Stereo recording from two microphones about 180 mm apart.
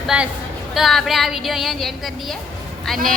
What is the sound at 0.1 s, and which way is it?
A woman's voice, 5° right (ahead or behind).